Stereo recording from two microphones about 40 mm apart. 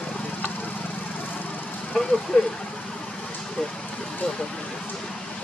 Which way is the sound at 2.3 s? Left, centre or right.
Left.